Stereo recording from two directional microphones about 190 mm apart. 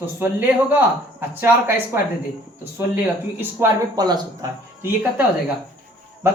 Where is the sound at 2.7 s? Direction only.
10° right (ahead or behind).